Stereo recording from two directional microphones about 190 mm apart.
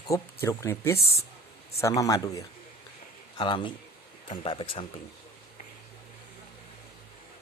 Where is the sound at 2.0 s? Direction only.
15° left (ahead or behind).